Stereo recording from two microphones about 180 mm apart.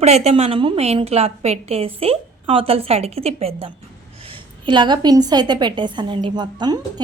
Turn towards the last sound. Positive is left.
turn(degrees=-25)  # may be behind; listen again after turning